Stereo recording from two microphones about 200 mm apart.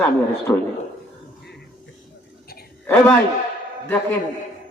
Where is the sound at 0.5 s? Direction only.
10° left (ahead or behind).